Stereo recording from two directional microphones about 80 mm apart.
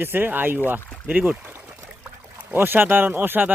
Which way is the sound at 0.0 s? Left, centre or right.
Right.